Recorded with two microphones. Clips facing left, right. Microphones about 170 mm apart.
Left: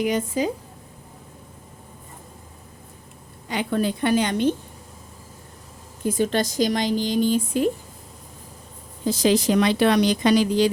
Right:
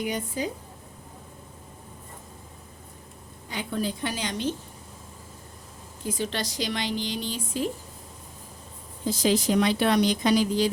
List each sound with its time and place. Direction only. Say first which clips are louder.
0.0 s speech: left 7 dB; 90° left
3.5 s a woman's voice: left 6 dB; 75° left (ahead or behind); by 4.5 s 55° left (ahead or behind)
6.1 s a woman's voice: left 8 dB; 50° left (ahead or behind)
9.0 s a woman's voice: left 4 dB; 85° left